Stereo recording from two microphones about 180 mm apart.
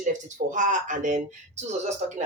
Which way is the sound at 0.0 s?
45° right (ahead or behind).